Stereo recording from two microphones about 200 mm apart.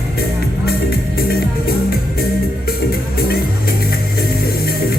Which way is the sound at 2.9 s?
50° left (ahead or behind).